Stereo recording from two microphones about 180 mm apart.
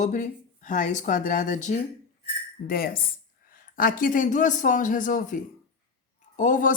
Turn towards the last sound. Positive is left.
turn(degrees=50)  # may be behind; listen again after turning